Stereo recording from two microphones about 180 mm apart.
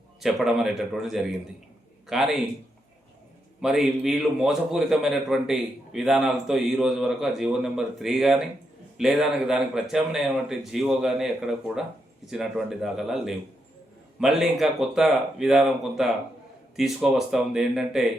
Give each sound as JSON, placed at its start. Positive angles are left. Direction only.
{"t": 0.2, "sound": "a man's voice", "side_deg": 0}
{"t": 3.6, "sound": "a man's voice", "side_deg": 0}